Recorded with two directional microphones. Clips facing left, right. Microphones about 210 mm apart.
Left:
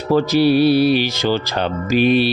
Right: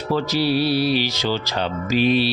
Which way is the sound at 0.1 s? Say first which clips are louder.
Left 6 dB; 50° left (ahead or behind).